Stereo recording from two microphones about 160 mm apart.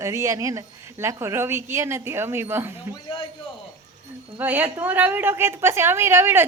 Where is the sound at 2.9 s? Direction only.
30° left (ahead or behind).